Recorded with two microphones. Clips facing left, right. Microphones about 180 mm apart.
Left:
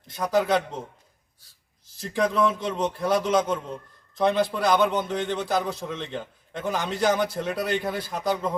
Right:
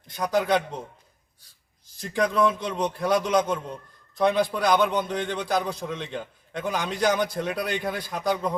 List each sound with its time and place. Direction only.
0.2 s a man's voice: 5° left (ahead or behind)
2.0 s a man's voice: 5° left (ahead or behind)